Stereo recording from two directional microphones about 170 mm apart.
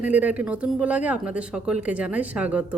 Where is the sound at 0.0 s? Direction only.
10° right (ahead or behind).